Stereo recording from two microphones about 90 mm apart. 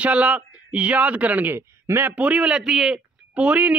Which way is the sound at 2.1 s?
15° right (ahead or behind).